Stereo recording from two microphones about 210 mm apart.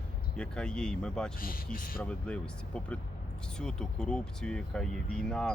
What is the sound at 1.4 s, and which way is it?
Speech, 45° left (ahead or behind).